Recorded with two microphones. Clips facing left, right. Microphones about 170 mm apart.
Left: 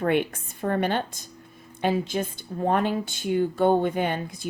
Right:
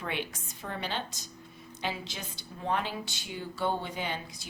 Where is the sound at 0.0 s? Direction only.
55° left (ahead or behind).